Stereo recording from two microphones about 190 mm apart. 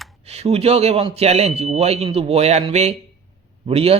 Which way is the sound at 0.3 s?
35° right (ahead or behind).